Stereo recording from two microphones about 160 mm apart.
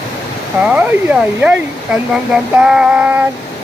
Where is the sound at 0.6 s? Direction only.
10° right (ahead or behind).